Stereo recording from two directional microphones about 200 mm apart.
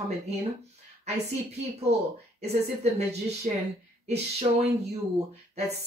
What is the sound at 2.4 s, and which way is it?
Speech, 35° right (ahead or behind).